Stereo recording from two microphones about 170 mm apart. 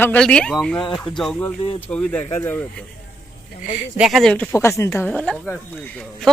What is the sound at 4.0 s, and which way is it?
Speech, centre (ahead or behind).